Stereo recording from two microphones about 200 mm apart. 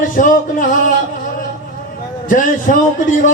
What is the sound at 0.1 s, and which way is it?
Speech, 40° left (ahead or behind).